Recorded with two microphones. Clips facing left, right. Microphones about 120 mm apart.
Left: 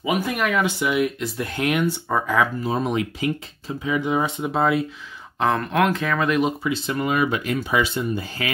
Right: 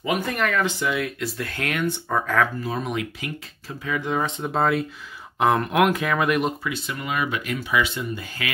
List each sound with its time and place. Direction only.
0.0 s speech: 5° left (ahead or behind)
2.6 s speech: 30° left (ahead or behind)
3.6 s speech: 15° left (ahead or behind); by 4.8 s centre (ahead or behind)
5.4 s speech: 10° right (ahead or behind)
6.6 s speech: 30° left (ahead or behind)